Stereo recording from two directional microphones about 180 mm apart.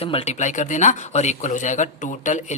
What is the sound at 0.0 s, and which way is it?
Speech, 35° left (ahead or behind).